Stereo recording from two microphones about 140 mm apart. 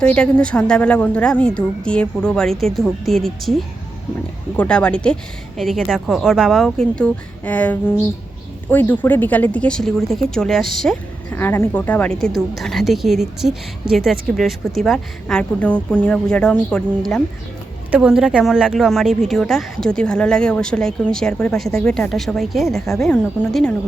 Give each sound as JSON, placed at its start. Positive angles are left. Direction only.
{"t": 0.0, "sound": "a woman's voice", "side_deg": 10}
{"t": 11.3, "sound": "speech", "side_deg": 15}
{"t": 17.9, "sound": "speech", "side_deg": -5}